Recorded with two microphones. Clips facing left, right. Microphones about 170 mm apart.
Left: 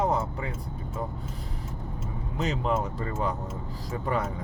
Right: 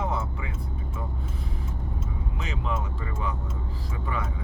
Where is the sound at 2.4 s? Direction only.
40° left (ahead or behind).